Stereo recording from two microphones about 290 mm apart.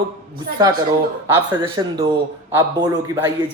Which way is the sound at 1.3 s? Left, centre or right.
Centre.